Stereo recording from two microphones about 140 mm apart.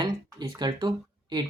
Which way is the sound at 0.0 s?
30° right (ahead or behind).